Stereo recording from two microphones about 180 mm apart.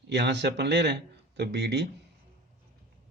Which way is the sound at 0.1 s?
70° right (ahead or behind).